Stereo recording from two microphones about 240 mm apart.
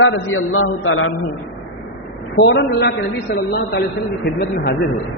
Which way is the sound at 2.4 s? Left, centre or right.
Left.